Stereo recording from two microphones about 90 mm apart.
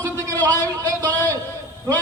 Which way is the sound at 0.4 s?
40° right (ahead or behind).